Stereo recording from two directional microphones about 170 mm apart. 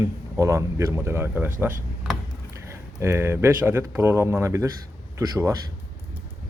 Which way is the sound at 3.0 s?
15° right (ahead or behind).